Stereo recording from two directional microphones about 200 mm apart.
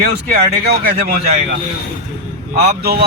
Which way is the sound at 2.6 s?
50° right (ahead or behind).